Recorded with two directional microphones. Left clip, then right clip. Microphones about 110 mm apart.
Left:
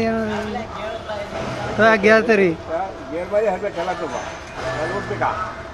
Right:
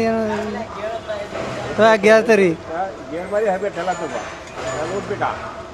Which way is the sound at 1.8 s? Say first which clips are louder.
Right 2 dB; 20° right (ahead or behind).